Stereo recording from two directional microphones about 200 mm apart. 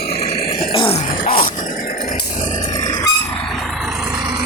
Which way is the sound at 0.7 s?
25° left (ahead or behind).